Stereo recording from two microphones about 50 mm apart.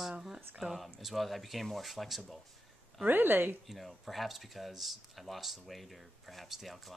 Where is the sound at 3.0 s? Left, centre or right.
Right.